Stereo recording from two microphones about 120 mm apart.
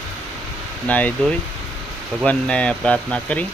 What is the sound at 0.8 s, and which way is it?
Speech, 10° left (ahead or behind).